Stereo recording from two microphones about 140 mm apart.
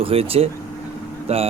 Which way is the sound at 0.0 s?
45° right (ahead or behind).